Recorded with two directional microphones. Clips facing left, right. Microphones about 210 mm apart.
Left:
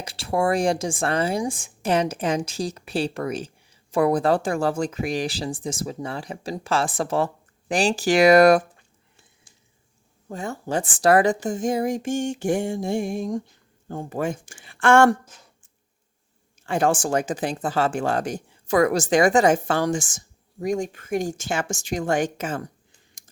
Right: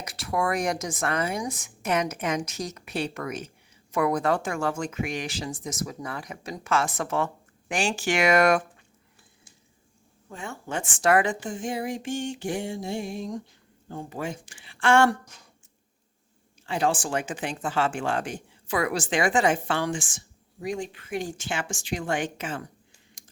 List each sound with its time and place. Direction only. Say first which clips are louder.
0.0 s a woman's voice: left 5 dB; 30° left (ahead or behind)
10.2 s speech: left 7 dB; 40° left (ahead or behind)
16.6 s speech: left 5 dB; 50° left (ahead or behind)